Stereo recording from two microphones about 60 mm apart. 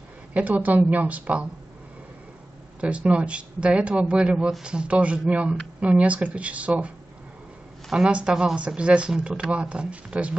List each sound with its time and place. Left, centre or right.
0.3 s speech: right
2.8 s speech: right
7.9 s speech: centre